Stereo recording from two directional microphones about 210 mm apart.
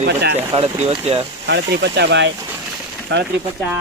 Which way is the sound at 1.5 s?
55° right (ahead or behind).